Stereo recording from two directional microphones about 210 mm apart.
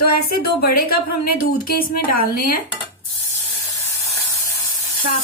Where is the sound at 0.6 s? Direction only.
45° left (ahead or behind).